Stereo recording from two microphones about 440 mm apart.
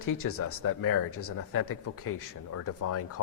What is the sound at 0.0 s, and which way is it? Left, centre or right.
Speech, left.